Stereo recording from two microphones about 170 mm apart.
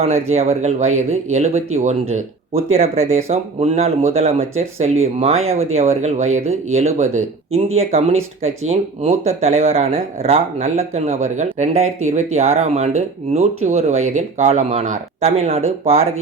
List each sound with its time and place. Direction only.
0.0 s speech: 40° right (ahead or behind)